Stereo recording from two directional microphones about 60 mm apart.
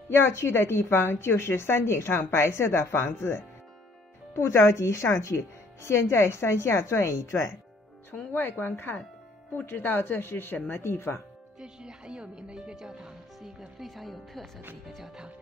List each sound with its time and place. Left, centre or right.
0.1 s a woman's voice: left
8.3 s speech: left
11.6 s speech: centre